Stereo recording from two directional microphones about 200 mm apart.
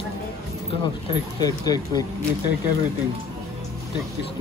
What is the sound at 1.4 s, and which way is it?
Speech, 20° left (ahead or behind).